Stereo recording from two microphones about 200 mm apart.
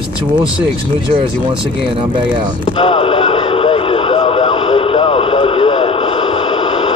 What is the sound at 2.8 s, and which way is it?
Radio, 30° left (ahead or behind).